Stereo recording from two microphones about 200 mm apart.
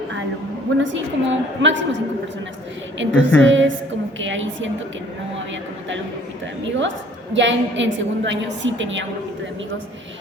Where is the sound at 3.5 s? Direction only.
70° right (ahead or behind).